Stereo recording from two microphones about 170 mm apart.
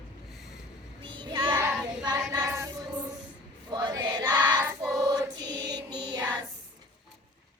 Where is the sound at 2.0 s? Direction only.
25° right (ahead or behind).